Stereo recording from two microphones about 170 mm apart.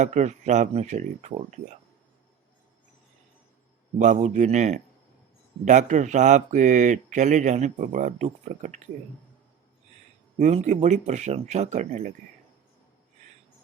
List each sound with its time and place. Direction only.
0.0 s speech: 45° right (ahead or behind)
3.9 s speech: 45° right (ahead or behind)
10.3 s speech: 45° right (ahead or behind)